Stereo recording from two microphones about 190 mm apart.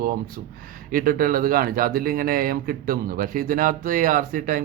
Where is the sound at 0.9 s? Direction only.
45° right (ahead or behind).